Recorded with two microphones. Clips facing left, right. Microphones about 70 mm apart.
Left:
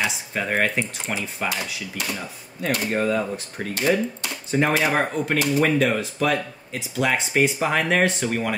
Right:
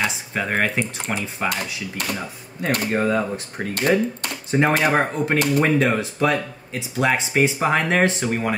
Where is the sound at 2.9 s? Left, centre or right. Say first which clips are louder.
Right 2 dB; right.